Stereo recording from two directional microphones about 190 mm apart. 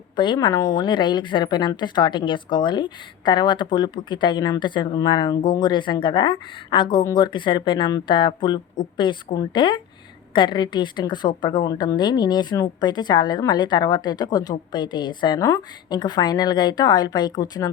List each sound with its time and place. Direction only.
0.2 s a woman's voice: 25° left (ahead or behind)